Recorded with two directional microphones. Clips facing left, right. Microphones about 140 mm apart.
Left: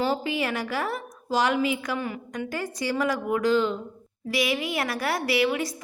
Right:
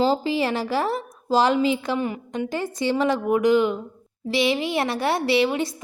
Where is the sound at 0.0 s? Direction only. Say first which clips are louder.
Right 5 dB; 30° right (ahead or behind).